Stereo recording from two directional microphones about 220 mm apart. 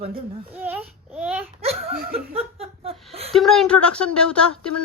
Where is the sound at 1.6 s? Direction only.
25° right (ahead or behind).